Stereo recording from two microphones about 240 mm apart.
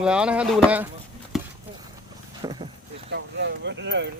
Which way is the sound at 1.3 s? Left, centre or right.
Centre.